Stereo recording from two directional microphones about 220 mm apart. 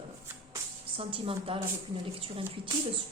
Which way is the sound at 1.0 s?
25° right (ahead or behind).